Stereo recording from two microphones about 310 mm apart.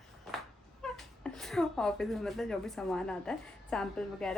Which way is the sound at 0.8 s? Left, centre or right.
Centre.